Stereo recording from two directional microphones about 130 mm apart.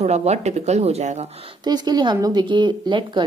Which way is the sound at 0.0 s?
55° right (ahead or behind).